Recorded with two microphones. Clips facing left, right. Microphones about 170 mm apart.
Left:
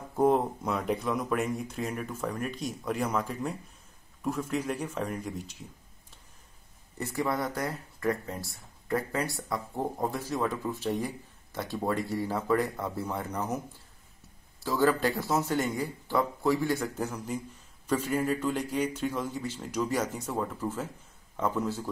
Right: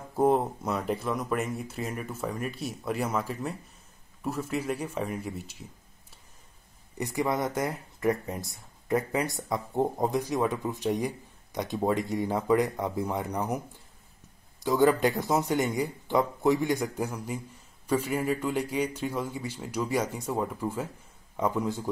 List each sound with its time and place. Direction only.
0.1 s speech: 5° right (ahead or behind)
7.0 s speech: 15° right (ahead or behind)
14.6 s speech: 15° right (ahead or behind)